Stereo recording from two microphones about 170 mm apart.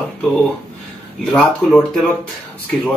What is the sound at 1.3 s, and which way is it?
Speech, 5° left (ahead or behind).